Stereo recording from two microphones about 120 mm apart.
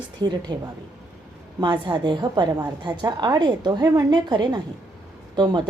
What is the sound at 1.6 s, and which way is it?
A woman's voice, 40° right (ahead or behind).